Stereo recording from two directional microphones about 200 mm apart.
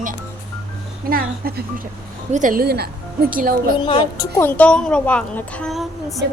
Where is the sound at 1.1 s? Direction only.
50° right (ahead or behind).